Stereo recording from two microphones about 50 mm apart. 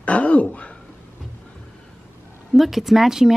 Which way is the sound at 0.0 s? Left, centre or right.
Left.